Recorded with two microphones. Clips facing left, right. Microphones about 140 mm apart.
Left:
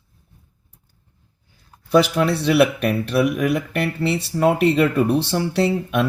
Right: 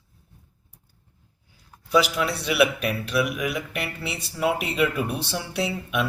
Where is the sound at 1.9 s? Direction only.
50° left (ahead or behind).